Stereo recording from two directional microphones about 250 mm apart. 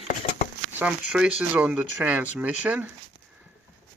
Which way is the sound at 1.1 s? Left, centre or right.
Centre.